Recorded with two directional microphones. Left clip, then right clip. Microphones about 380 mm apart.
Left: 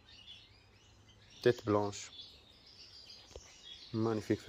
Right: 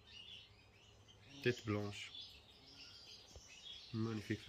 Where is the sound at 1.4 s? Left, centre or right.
Left.